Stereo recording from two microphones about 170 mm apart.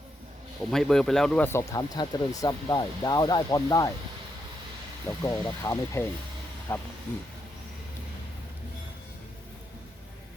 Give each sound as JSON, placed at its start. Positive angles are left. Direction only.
{"t": 0.7, "sound": "speech", "side_deg": 5}
{"t": 5.0, "sound": "speech", "side_deg": 10}